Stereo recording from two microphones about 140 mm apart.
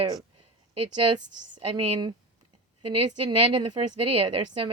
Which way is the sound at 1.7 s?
35° right (ahead or behind).